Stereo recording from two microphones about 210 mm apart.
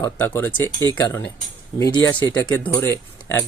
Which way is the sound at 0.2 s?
10° left (ahead or behind).